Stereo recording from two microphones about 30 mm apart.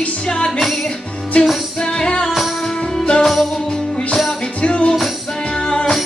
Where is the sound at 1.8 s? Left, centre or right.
Left.